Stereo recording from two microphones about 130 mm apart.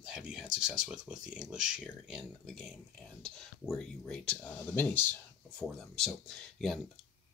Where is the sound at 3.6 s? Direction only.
5° left (ahead or behind).